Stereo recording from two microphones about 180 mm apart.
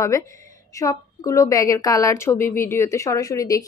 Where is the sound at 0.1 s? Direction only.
15° left (ahead or behind).